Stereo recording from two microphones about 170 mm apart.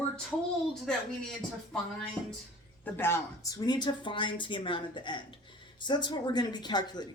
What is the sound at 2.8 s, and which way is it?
Speech, 10° left (ahead or behind).